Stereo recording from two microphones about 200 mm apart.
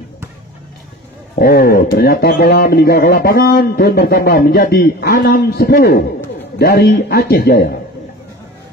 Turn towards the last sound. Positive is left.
turn(degrees=50)  # may be behind; listen again after turning